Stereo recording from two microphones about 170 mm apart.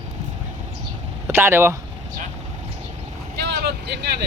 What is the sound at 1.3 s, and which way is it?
Speech, 15° right (ahead or behind).